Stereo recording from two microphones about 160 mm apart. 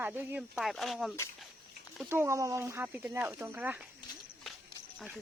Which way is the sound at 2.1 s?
15° right (ahead or behind).